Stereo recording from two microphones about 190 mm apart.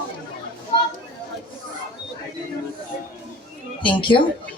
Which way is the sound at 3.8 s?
25° left (ahead or behind).